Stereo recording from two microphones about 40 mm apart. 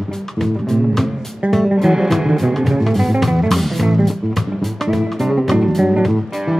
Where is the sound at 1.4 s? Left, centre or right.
Right.